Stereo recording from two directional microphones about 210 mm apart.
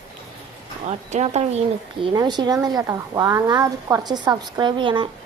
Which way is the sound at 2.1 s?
20° right (ahead or behind).